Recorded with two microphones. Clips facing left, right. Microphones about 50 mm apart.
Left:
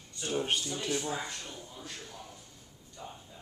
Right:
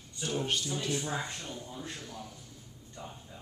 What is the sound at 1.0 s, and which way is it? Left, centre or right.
Speech, centre.